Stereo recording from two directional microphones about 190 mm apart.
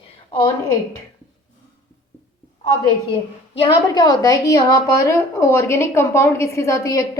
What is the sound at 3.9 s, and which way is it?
A woman's voice, 20° left (ahead or behind).